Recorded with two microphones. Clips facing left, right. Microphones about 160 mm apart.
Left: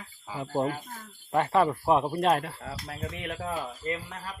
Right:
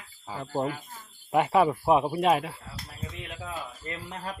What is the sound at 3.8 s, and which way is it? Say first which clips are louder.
Speech: left 9 dB; 25° left (ahead or behind).